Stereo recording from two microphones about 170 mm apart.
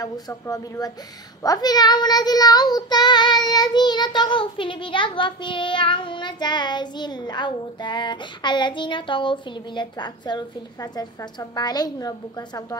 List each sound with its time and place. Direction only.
0.0 s child singing: 20° left (ahead or behind)